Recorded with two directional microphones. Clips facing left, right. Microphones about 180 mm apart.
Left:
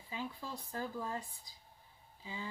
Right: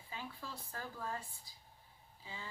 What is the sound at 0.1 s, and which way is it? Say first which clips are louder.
Speech: left 5 dB; 20° left (ahead or behind).